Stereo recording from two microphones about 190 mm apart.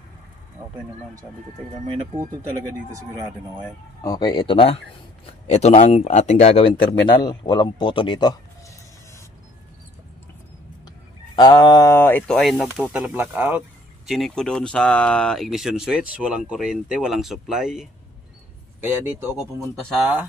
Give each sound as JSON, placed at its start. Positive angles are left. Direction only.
{"t": 4.0, "sound": "a man's voice", "side_deg": 20}
{"t": 11.3, "sound": "speech", "side_deg": 20}
{"t": 19.4, "sound": "speech", "side_deg": 0}